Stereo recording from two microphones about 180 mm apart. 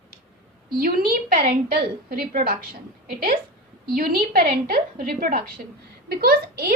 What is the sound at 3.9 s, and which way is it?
A woman's voice, 55° right (ahead or behind).